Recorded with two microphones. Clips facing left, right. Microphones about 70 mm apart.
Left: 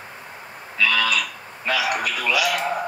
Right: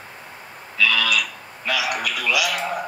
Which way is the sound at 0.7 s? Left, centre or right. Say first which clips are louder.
Even; left.